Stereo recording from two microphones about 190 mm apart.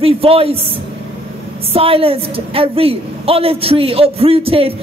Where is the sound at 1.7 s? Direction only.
30° right (ahead or behind).